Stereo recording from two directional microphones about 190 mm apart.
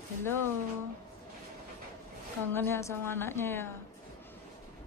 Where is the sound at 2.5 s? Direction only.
10° left (ahead or behind).